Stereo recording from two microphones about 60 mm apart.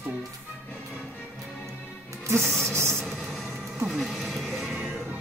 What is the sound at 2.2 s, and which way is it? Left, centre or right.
Music, right.